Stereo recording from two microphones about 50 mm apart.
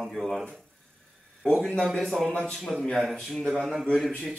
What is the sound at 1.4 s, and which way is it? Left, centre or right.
A man's voice, centre.